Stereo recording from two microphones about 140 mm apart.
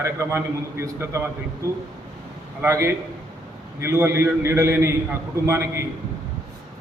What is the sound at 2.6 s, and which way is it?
A man's voice, 20° right (ahead or behind).